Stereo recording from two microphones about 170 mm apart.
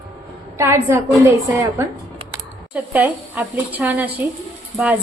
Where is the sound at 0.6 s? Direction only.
15° right (ahead or behind).